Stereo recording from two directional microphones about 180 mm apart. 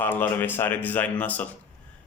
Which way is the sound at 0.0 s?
10° left (ahead or behind).